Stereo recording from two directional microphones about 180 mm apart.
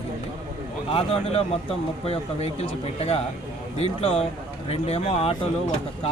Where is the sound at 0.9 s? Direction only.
30° left (ahead or behind).